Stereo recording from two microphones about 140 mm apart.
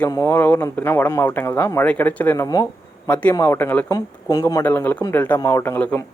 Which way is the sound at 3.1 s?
10° left (ahead or behind).